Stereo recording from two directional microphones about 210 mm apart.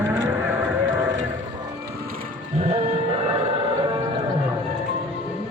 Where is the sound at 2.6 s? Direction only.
30° right (ahead or behind).